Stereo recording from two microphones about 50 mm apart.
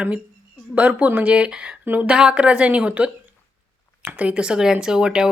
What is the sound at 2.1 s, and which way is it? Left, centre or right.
Speech, centre.